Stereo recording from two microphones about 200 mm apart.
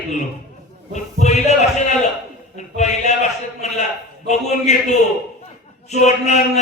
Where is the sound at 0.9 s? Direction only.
35° left (ahead or behind).